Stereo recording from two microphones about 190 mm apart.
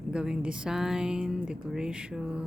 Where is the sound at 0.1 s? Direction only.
5° right (ahead or behind).